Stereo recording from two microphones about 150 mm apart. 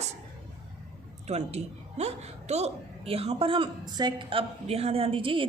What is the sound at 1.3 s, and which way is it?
A woman's voice, 45° right (ahead or behind).